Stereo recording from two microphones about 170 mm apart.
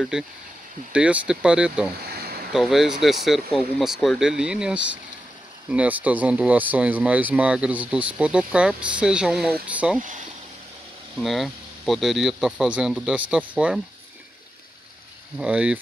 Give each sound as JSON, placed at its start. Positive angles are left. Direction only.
{"t": 0.1, "sound": "speech", "side_deg": -5}
{"t": 2.0, "sound": "a sound", "side_deg": -65}
{"t": 2.5, "sound": "speech", "side_deg": 0}
{"t": 11.1, "sound": "speech", "side_deg": 0}
{"t": 15.3, "sound": "speech", "side_deg": -5}